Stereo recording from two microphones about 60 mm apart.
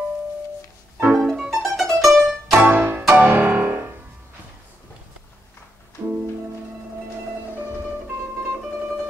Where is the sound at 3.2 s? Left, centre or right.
Right.